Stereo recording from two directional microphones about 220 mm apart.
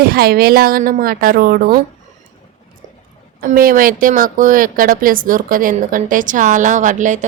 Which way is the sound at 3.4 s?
40° right (ahead or behind).